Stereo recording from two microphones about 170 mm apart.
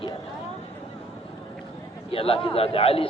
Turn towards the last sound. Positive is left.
turn(degrees=35)  # may be behind; listen again after turning